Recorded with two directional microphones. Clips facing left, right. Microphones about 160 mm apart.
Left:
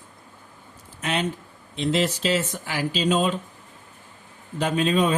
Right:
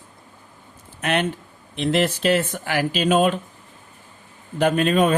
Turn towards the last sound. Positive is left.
turn(degrees=-55)  # may be behind; listen again after turning